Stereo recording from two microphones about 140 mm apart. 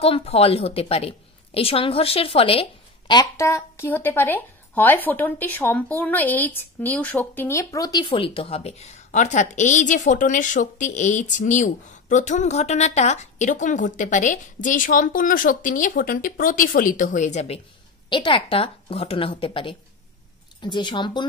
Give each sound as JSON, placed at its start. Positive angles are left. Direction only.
{"t": 0.0, "sound": "a woman's voice", "side_deg": 45}
{"t": 18.1, "sound": "a woman's voice", "side_deg": 35}